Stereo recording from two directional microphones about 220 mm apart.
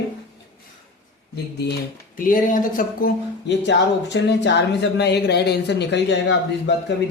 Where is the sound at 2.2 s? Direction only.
40° left (ahead or behind).